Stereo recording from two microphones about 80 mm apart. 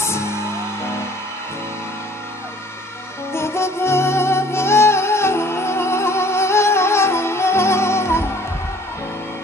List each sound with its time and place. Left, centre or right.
0.0 s music: left
3.3 s music: left